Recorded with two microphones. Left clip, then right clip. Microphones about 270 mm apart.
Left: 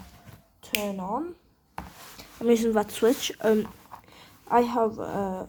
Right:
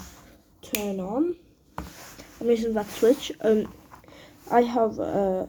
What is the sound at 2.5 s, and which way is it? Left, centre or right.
Speech, left.